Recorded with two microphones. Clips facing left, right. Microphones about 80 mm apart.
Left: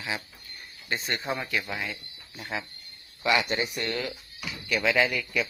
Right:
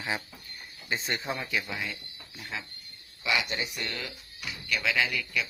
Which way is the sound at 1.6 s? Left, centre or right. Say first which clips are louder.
Left 2 dB; centre.